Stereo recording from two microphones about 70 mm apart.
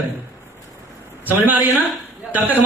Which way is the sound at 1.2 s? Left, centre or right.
Right.